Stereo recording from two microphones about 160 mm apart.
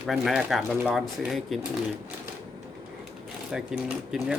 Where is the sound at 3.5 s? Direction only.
5° right (ahead or behind).